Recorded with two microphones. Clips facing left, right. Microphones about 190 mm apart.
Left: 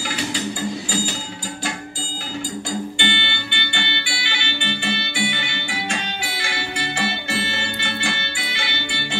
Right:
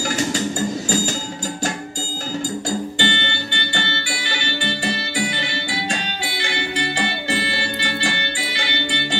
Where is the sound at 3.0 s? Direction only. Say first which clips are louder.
Right 3 dB; 40° right (ahead or behind).